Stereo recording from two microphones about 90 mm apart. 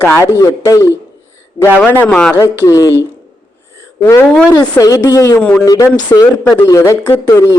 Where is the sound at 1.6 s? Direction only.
20° left (ahead or behind).